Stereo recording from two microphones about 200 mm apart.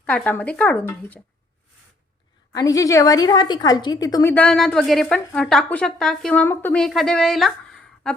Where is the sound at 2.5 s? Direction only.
20° left (ahead or behind).